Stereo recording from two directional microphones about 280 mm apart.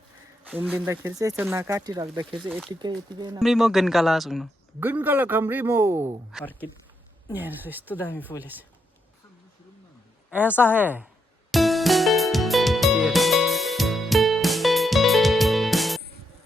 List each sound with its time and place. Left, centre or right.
0.4 s speech: centre
2.3 s speech: centre
2.7 s speech: centre
3.4 s speech: centre
6.3 s speech: centre
7.3 s speech: centre
8.3 s speech: centre
10.2 s speech: centre
11.5 s music: centre